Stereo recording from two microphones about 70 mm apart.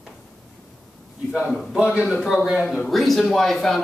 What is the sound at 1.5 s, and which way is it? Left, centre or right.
Speech, centre.